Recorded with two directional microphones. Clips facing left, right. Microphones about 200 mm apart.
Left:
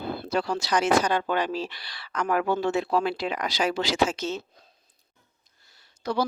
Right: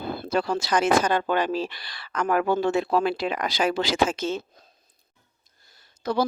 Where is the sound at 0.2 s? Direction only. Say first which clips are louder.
Right 4 dB; 50° right (ahead or behind).